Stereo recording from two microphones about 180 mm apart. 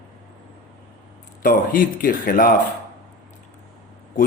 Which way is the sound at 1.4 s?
50° left (ahead or behind).